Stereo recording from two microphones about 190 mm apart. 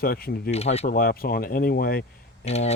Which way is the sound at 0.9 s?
50° left (ahead or behind).